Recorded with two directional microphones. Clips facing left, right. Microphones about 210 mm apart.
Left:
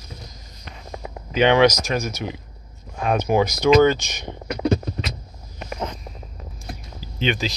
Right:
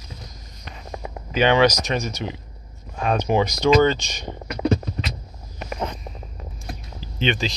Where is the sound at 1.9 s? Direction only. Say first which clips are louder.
Left 1 dB; centre (ahead or behind).